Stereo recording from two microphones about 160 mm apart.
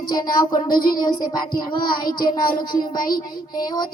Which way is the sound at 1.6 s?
30° left (ahead or behind).